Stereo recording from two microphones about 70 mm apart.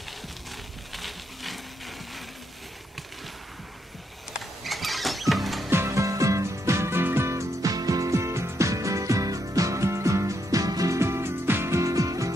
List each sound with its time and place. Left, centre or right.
0.9 s a sound: centre
4.3 s rodents: centre
5.3 s music: centre
5.7 s music: right
7.6 s music: right
11.0 s music: right